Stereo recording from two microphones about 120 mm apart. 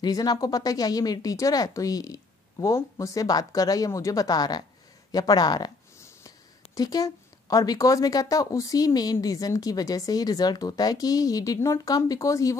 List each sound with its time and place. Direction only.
0.0 s speech: 35° left (ahead or behind)